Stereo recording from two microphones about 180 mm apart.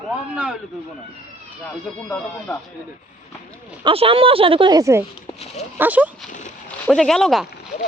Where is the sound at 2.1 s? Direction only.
10° left (ahead or behind).